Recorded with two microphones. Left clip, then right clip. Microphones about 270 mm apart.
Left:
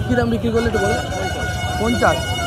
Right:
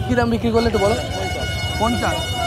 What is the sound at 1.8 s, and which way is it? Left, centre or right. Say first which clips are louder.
Speech: left 4 dB; centre.